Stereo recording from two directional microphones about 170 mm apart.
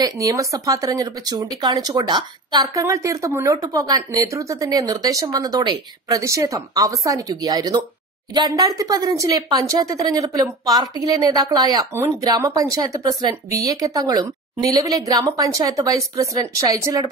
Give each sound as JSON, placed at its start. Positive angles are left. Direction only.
{"t": 0.0, "sound": "speech", "side_deg": -20}